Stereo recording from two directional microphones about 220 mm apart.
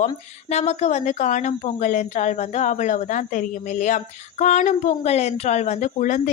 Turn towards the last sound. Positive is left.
turn(degrees=35)  # may be behind; listen again after turning